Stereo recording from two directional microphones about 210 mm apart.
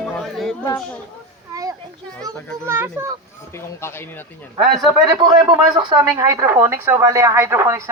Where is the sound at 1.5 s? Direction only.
15° right (ahead or behind).